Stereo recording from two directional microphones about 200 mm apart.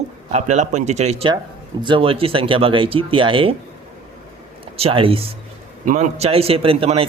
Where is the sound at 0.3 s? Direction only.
35° right (ahead or behind).